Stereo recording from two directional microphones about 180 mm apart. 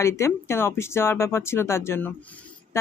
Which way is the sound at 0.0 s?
15° left (ahead or behind).